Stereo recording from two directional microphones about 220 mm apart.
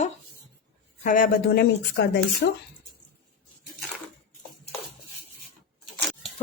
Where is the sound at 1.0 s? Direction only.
40° left (ahead or behind).